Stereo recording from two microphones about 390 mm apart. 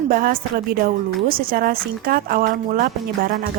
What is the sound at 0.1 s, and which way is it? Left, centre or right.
A woman's voice, right.